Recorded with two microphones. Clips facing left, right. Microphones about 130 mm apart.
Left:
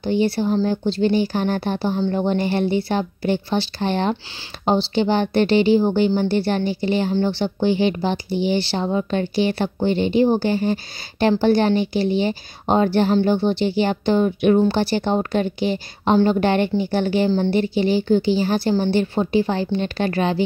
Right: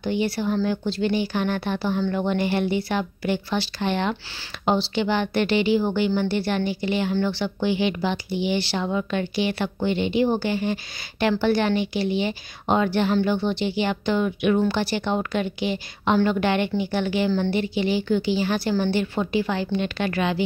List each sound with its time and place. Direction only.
0.0 s a woman's voice: 30° left (ahead or behind)